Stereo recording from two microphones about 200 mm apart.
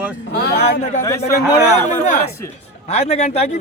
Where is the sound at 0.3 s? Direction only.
55° left (ahead or behind).